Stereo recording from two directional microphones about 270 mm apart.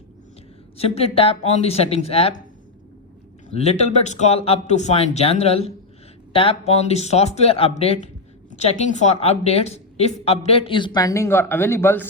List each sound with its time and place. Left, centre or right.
0.8 s speech: left
3.5 s speech: left